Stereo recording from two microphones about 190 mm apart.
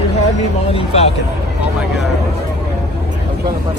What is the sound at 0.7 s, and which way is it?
Speech, 30° left (ahead or behind).